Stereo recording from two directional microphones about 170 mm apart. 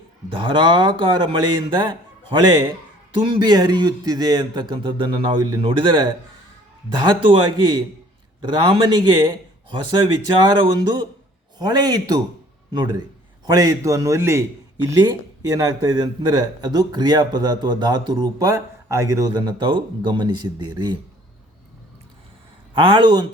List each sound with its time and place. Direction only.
0.3 s speech: 30° right (ahead or behind)
13.4 s speech: 20° right (ahead or behind)
22.7 s speech: 30° right (ahead or behind)